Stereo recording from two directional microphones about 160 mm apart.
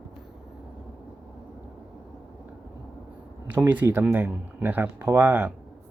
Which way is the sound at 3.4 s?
10° right (ahead or behind).